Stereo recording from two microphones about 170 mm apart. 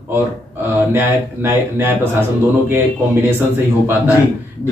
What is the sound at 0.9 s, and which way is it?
Speech, 10° right (ahead or behind).